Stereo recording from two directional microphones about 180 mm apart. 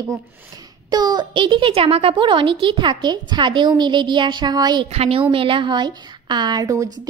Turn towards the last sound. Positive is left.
turn(degrees=-20)  # may be behind; listen again after turning